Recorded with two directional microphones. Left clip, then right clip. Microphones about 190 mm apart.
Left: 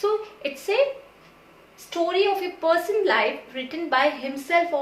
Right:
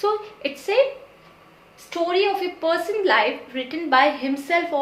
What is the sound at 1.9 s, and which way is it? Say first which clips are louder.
A woman's voice: right 1 dB; 25° right (ahead or behind).